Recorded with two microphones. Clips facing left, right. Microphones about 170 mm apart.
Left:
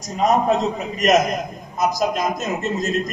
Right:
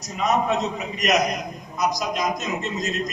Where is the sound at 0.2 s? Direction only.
45° left (ahead or behind).